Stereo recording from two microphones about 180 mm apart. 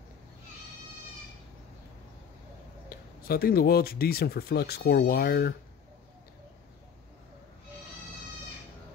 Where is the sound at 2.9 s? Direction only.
55° left (ahead or behind).